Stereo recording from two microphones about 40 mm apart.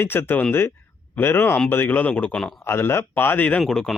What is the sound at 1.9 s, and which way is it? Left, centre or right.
Speech, left.